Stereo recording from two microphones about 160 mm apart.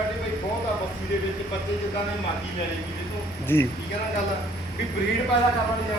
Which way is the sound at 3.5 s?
15° left (ahead or behind).